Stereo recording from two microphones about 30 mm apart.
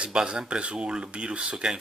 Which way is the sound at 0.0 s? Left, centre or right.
Right.